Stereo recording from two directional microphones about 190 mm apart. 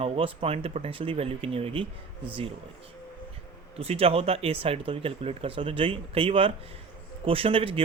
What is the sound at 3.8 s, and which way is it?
Speech, 30° right (ahead or behind).